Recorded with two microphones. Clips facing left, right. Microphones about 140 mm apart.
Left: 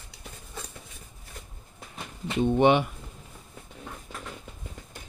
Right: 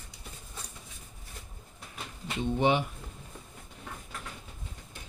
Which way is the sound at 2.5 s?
65° left (ahead or behind).